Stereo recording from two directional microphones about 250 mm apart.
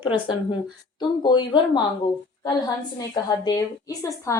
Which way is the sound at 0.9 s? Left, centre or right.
Centre.